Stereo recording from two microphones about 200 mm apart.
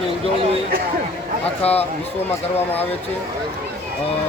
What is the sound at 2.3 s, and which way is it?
Speech, 10° left (ahead or behind).